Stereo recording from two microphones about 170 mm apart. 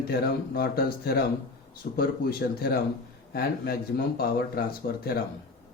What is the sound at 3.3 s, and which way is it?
Speech, 60° left (ahead or behind).